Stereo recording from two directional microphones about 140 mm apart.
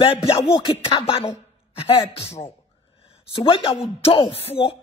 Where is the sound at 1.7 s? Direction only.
45° left (ahead or behind).